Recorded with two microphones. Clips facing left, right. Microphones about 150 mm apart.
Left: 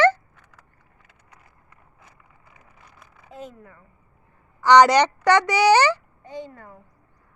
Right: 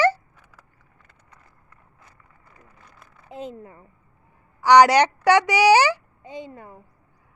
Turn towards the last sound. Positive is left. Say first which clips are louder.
# even
turn(degrees=-15)  # may be behind; listen again after turning